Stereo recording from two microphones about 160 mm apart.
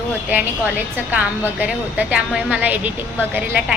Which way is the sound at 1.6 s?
10° right (ahead or behind).